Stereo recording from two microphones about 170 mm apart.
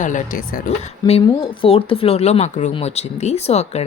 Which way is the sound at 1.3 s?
30° left (ahead or behind).